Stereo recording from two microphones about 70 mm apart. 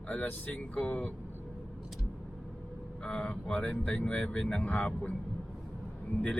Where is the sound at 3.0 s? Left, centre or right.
Centre.